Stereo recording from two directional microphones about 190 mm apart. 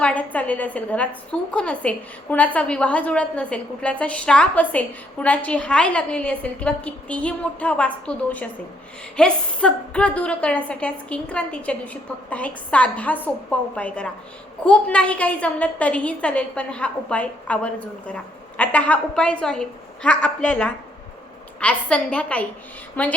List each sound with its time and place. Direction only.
0.0 s a woman's voice: 10° left (ahead or behind)